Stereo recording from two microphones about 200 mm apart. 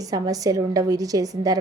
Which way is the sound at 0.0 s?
15° right (ahead or behind).